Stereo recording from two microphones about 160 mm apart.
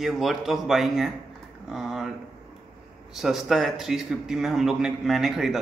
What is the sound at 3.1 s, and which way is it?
A man's voice, centre (ahead or behind).